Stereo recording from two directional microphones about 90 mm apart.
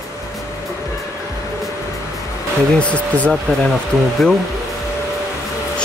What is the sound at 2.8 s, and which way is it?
Speech, 15° left (ahead or behind).